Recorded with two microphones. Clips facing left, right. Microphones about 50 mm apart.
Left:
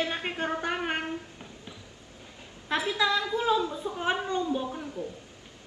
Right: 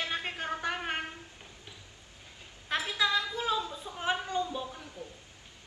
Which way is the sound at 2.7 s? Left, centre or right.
Left.